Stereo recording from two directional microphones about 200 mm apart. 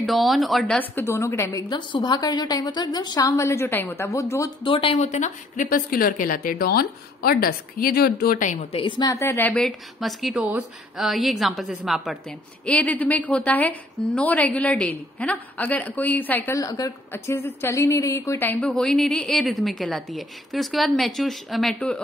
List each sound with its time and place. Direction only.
0.0 s a woman's voice: centre (ahead or behind); by 4.7 s 15° left (ahead or behind)
4.7 s a woman's voice: 30° left (ahead or behind)
8.8 s a woman's voice: 20° left (ahead or behind); by 22.0 s 5° left (ahead or behind)